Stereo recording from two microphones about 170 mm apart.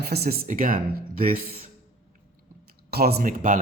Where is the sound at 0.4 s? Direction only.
55° right (ahead or behind).